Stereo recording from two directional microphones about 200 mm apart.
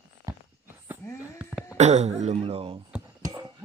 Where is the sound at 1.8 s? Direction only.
35° right (ahead or behind).